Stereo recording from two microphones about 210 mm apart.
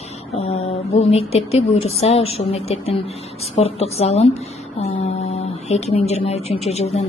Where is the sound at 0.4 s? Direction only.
30° left (ahead or behind).